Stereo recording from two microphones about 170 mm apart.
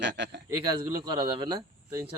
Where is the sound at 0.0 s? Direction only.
90° right.